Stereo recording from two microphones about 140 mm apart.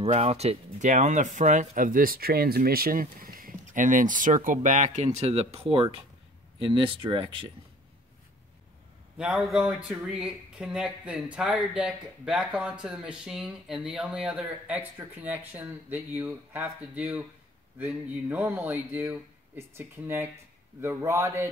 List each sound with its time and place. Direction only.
0.0 s speech: 45° right (ahead or behind)
9.2 s a man's voice: 5° right (ahead or behind); by 21.5 s 20° right (ahead or behind)